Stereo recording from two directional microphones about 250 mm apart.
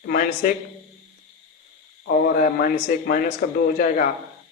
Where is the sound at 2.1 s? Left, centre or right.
Left.